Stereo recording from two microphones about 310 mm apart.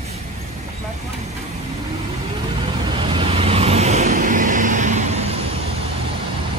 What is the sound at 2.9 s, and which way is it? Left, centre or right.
Vehicle, centre.